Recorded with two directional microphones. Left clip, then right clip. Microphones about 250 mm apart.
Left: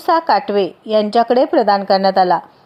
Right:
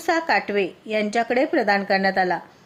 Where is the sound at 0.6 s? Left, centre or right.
Centre.